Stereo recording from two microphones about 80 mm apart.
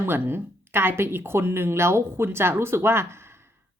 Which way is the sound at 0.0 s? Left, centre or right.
Right.